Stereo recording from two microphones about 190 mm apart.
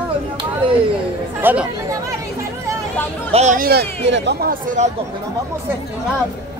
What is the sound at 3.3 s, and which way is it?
Speech, 35° right (ahead or behind).